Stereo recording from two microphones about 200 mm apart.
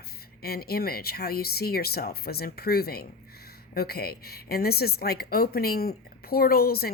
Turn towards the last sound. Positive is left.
turn(degrees=50)  # may be behind; listen again after turning